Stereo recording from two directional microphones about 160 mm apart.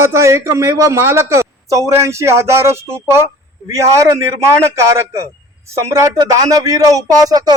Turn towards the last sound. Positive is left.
turn(degrees=-25)  # may be behind; listen again after turning